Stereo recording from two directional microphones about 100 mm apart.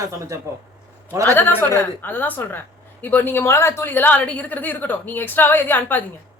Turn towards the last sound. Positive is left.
turn(degrees=20)  # may be behind; listen again after turning